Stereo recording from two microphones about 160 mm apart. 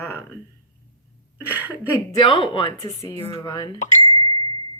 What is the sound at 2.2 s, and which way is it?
A woman's voice, 30° left (ahead or behind).